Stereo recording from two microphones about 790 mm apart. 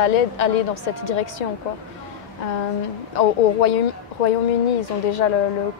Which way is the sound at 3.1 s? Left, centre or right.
Left.